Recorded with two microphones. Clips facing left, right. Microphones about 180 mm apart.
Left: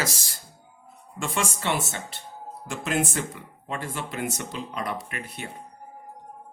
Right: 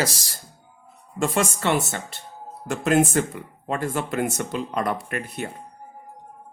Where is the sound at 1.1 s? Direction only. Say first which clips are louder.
Right 6 dB; 40° right (ahead or behind).